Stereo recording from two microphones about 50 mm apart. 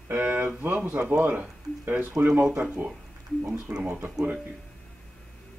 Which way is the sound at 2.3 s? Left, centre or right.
Right.